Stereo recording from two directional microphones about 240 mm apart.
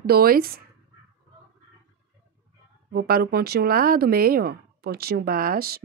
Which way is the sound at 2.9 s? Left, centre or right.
Right.